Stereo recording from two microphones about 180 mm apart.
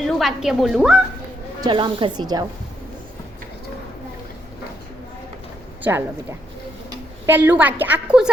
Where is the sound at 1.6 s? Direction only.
25° right (ahead or behind).